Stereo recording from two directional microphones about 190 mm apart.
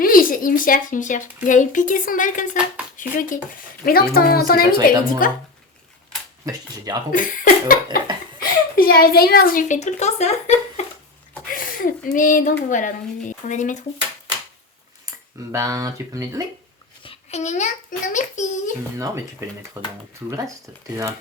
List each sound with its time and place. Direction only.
0.0 s speech: 50° left (ahead or behind)
6.4 s speech: 20° right (ahead or behind)
7.1 s speech: 45° left (ahead or behind)
11.5 s speech: 45° left (ahead or behind)
15.5 s speech: 15° right (ahead or behind)
17.0 s babbling: 30° left (ahead or behind)
18.1 s speech: 40° left (ahead or behind)
18.9 s speech: 15° right (ahead or behind)